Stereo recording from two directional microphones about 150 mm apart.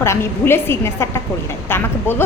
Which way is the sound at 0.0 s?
15° left (ahead or behind).